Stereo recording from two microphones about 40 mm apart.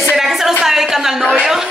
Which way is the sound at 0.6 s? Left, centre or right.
Centre.